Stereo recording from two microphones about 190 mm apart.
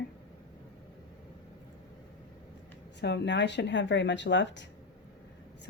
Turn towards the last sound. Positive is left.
turn(degrees=70)  # may be behind; listen again after turning